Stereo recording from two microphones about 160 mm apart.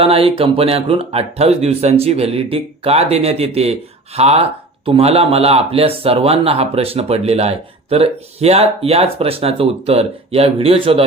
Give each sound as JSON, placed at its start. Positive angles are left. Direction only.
{"t": 0.0, "sound": "speech", "side_deg": -35}